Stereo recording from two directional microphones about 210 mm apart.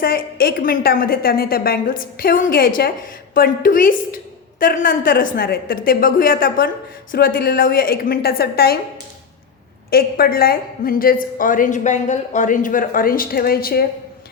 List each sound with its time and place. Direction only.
0.0 s a woman's voice: 45° left (ahead or behind)
9.9 s a woman's voice: 45° left (ahead or behind)